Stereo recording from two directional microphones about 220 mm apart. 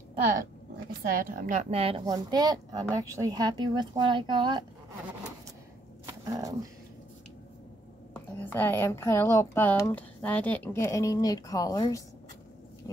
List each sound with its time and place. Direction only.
1.2 s speech: 40° right (ahead or behind); by 4.6 s 20° right (ahead or behind)
6.0 s dog: 15° right (ahead or behind)
8.1 s a woman's voice: 10° left (ahead or behind)